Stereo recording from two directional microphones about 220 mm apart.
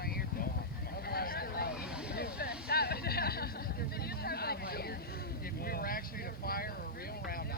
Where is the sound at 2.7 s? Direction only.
45° left (ahead or behind).